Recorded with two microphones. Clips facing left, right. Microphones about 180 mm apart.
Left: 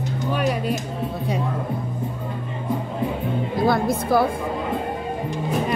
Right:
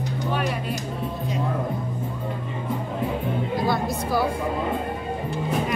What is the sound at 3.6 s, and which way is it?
Speech, 55° left (ahead or behind).